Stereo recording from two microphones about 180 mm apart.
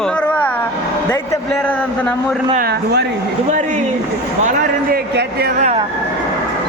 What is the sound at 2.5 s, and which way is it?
Speech, 60° right (ahead or behind).